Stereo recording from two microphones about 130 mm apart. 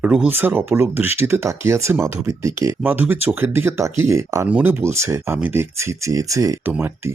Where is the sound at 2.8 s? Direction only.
15° right (ahead or behind).